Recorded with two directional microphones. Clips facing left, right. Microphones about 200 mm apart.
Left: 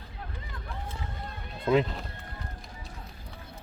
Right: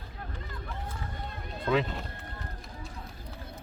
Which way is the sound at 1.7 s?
25° left (ahead or behind).